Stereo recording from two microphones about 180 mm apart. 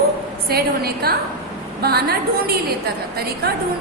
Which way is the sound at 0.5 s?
60° right (ahead or behind).